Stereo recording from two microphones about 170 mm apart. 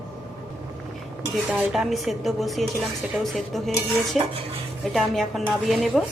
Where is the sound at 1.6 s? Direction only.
Centre (ahead or behind).